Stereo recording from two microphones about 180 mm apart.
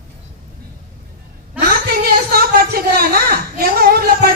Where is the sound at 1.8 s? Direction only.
60° right (ahead or behind).